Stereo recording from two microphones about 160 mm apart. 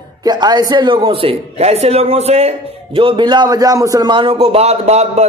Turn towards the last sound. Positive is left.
turn(degrees=-40)  # may be behind; listen again after turning